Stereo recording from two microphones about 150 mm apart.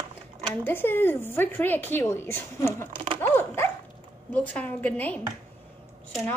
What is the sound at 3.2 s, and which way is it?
Speech, 15° left (ahead or behind).